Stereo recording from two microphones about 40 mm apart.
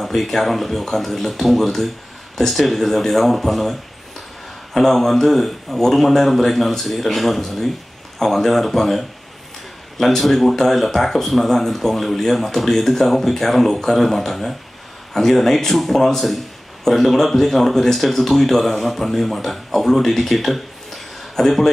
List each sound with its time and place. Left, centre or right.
0.0 s speech: centre
4.7 s speech: centre